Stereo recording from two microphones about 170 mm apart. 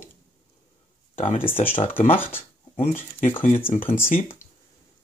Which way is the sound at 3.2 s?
45° left (ahead or behind).